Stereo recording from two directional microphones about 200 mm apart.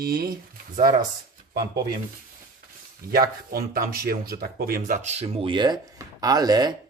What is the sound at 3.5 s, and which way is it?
Speech, 45° right (ahead or behind).